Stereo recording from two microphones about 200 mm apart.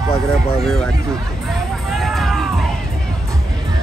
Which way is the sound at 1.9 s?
Centre (ahead or behind).